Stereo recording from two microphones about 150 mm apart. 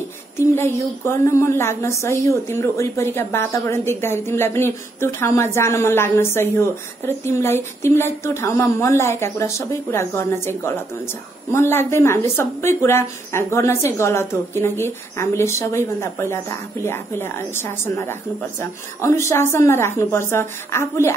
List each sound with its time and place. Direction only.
0.4 s a woman's voice: 15° left (ahead or behind)